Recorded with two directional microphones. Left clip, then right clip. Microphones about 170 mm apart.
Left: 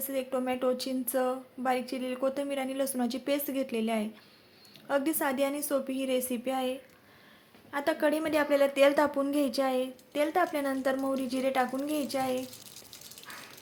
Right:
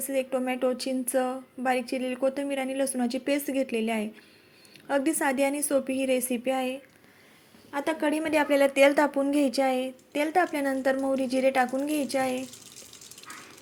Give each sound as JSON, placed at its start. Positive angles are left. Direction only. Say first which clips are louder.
{"t": 0.0, "sound": "a woman's voice", "louder": "right 4 dB", "side_deg": -10}